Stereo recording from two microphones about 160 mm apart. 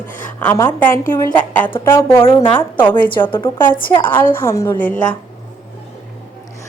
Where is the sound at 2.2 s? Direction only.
30° left (ahead or behind).